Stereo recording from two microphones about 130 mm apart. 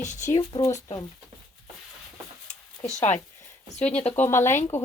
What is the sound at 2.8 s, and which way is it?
Speech, 60° left (ahead or behind).